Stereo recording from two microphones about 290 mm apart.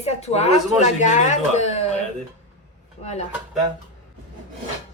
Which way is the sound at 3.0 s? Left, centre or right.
Left.